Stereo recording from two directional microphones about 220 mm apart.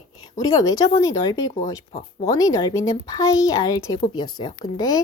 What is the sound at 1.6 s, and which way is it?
Speech, 35° left (ahead or behind).